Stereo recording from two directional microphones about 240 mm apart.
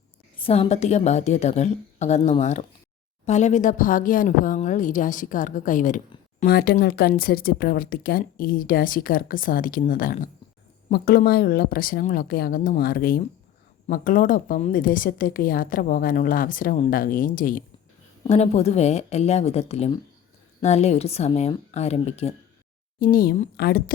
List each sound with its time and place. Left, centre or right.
0.3 s a woman's voice: left
23.0 s speech: left